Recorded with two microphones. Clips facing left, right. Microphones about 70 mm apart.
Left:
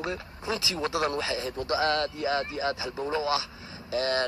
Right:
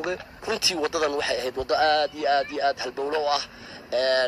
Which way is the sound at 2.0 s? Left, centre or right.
Right.